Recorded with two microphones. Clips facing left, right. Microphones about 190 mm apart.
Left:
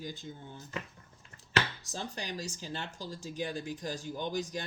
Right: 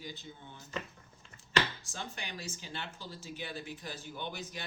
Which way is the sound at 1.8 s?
35° left (ahead or behind).